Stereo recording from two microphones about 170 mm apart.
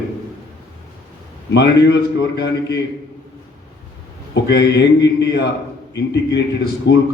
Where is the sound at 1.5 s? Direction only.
85° left.